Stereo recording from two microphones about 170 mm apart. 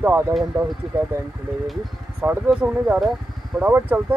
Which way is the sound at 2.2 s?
5° right (ahead or behind).